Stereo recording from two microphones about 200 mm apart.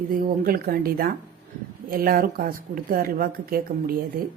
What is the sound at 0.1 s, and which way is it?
A woman's voice, 45° right (ahead or behind).